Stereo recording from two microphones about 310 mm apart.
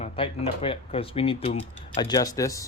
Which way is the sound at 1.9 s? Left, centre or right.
Centre.